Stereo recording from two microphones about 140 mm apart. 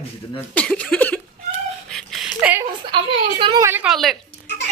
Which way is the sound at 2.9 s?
35° right (ahead or behind).